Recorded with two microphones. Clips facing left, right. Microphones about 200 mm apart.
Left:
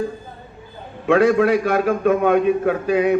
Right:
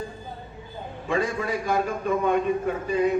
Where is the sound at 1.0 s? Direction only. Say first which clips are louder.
Left 12 dB; 75° left (ahead or behind).